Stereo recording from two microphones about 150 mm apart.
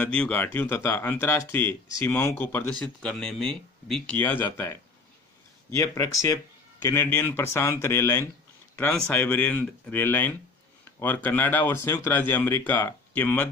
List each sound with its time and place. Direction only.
0.0 s speech: 10° left (ahead or behind)
3.0 s speech: 5° left (ahead or behind)
5.7 s speech: 20° left (ahead or behind)